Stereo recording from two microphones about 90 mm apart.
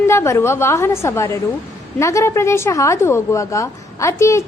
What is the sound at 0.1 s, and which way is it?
A woman's voice, 30° left (ahead or behind).